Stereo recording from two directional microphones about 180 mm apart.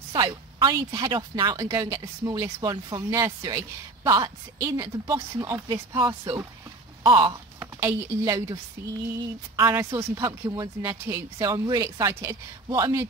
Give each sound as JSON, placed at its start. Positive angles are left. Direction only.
{"t": 0.1, "sound": "speech", "side_deg": -25}
{"t": 9.7, "sound": "speech", "side_deg": -15}